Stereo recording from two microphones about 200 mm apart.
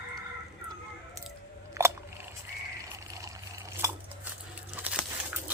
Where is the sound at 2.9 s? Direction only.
15° right (ahead or behind).